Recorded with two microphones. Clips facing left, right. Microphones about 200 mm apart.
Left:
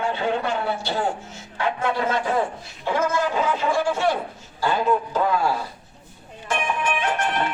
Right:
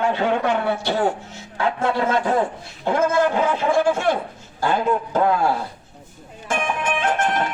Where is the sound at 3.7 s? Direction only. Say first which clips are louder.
Right 4 dB; 55° right (ahead or behind).